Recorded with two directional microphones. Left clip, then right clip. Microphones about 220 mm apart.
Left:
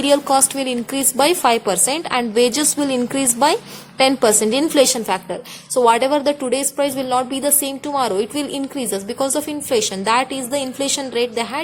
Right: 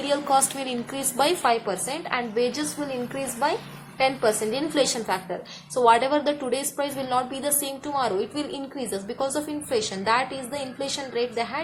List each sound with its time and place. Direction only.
0.0 s a woman's voice: 45° left (ahead or behind)